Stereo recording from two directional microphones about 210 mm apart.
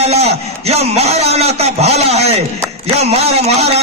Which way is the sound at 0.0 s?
30° right (ahead or behind).